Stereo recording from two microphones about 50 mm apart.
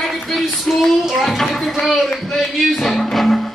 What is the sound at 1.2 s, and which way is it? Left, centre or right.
A man's voice, centre.